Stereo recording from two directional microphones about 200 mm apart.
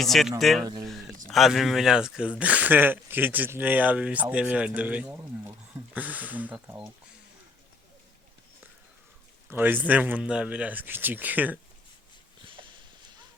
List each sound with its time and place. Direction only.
0.0 s speech: centre (ahead or behind)
0.6 s speech: 20° right (ahead or behind)
1.3 s speech: centre (ahead or behind)
9.5 s speech: 10° right (ahead or behind)